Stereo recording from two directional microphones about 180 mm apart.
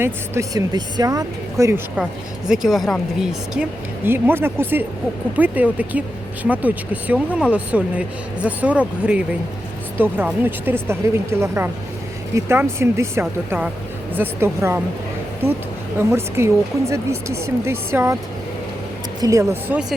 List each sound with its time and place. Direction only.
0.0 s speech: 15° right (ahead or behind)
2.5 s speech: centre (ahead or behind)
16.0 s speech: 15° right (ahead or behind)
19.2 s speech: 20° right (ahead or behind)